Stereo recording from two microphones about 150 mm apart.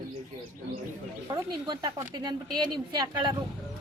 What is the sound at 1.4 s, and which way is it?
Speech, 30° right (ahead or behind).